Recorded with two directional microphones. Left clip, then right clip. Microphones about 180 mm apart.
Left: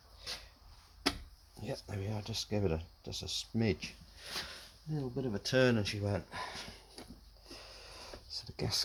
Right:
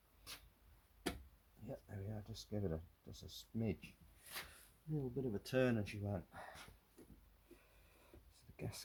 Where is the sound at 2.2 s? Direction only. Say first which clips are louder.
Left 11 dB; 50° left (ahead or behind).